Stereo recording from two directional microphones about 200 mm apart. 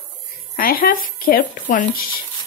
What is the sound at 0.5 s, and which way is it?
Speech, 45° left (ahead or behind).